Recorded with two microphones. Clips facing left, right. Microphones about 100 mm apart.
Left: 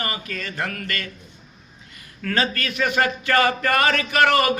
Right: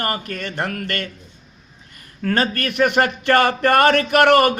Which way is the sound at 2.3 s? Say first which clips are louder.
Right 3 dB; 55° right (ahead or behind).